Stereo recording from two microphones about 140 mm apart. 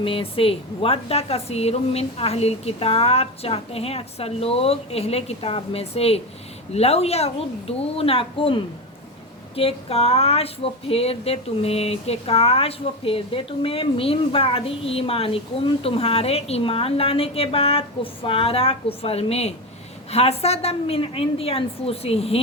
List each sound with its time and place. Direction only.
0.0 s speech: 40° left (ahead or behind)